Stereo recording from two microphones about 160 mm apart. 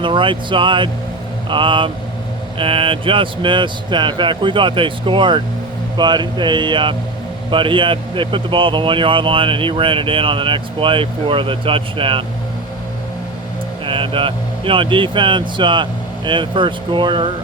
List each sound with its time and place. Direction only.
0.0 s speech: 30° right (ahead or behind)
13.8 s speech: 35° right (ahead or behind)